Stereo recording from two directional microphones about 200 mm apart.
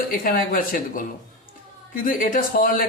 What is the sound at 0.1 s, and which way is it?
Speech, 45° left (ahead or behind).